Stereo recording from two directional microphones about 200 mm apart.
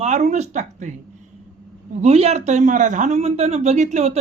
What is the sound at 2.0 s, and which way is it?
Speech, 30° right (ahead or behind).